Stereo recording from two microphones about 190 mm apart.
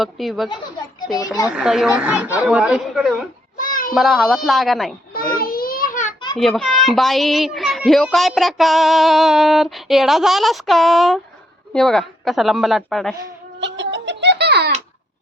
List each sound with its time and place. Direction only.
0.0 s a child's voice: centre (ahead or behind)
3.6 s cat: 45° left (ahead or behind)
3.9 s a child's voice: centre (ahead or behind)
5.1 s a sound: 50° left (ahead or behind)
6.3 s a child's voice: centre (ahead or behind)
13.6 s music: 70° right (ahead or behind)